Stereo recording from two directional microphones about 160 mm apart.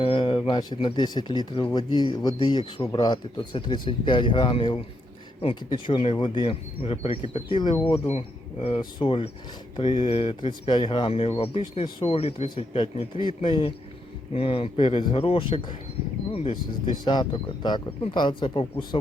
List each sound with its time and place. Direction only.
0.0 s speech: 35° left (ahead or behind)
17.0 s speech: 30° left (ahead or behind)